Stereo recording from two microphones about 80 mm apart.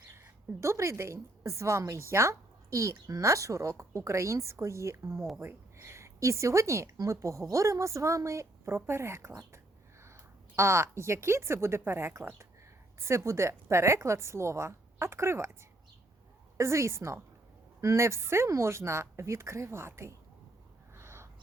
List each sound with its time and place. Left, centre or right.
0.6 s a woman's voice: right
16.6 s a woman's voice: right
20.9 s a sound: right